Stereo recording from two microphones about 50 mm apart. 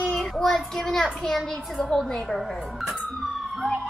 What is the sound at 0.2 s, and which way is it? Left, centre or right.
Child singing, centre.